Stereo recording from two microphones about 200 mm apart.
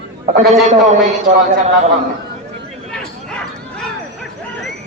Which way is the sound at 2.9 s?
5° left (ahead or behind).